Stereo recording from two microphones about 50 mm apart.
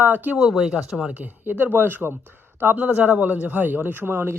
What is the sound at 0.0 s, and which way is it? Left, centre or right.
Speech, right.